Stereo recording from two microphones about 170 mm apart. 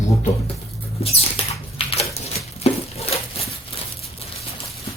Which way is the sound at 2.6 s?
35° left (ahead or behind).